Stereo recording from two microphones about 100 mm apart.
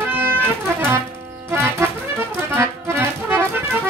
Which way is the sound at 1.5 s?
25° right (ahead or behind).